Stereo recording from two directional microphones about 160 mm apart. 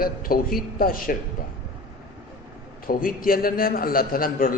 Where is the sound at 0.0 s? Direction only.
65° left (ahead or behind).